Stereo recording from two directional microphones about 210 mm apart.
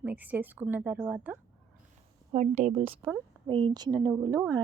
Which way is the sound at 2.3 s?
35° right (ahead or behind).